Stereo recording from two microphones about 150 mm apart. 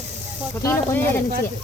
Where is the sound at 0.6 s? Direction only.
15° left (ahead or behind).